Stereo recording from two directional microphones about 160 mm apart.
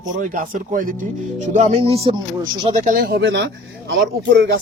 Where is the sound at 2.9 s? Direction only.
75° right (ahead or behind).